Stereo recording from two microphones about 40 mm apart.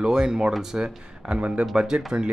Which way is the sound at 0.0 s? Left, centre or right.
Centre.